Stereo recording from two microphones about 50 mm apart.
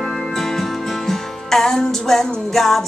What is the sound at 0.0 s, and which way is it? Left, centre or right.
Music, centre.